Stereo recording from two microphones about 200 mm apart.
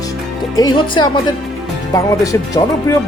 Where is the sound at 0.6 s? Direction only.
20° left (ahead or behind).